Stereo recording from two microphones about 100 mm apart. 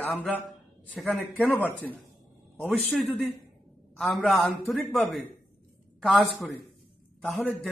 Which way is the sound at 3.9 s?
Centre (ahead or behind).